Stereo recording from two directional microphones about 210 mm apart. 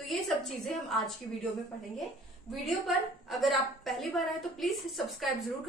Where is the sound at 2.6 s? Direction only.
Centre (ahead or behind).